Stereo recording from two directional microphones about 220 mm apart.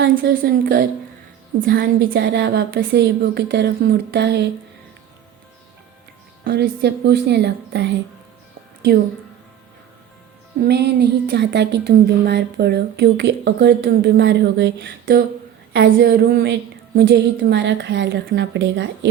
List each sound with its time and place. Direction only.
0.0 s speech: 45° right (ahead or behind)
6.4 s speech: 50° right (ahead or behind)
10.6 s speech: 50° right (ahead or behind)